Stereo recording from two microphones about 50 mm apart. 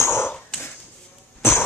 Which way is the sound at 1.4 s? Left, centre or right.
Left.